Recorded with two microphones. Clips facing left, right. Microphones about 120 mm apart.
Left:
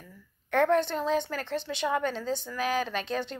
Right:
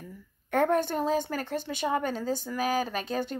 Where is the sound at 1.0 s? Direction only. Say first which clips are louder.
Even; 45° right (ahead or behind).